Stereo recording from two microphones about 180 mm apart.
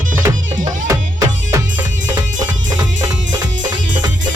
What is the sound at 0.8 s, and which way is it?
Music, 15° right (ahead or behind).